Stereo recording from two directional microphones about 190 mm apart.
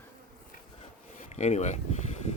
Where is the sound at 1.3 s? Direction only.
35° left (ahead or behind).